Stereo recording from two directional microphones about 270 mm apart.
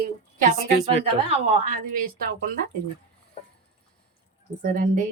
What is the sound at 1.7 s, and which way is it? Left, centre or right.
Speech, right.